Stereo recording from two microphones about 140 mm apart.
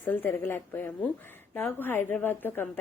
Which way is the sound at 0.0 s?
15° left (ahead or behind).